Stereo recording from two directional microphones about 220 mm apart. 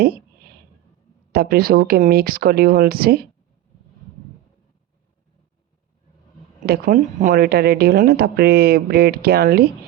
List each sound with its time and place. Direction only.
1.3 s speech: 45° right (ahead or behind)
6.7 s speech: 40° right (ahead or behind)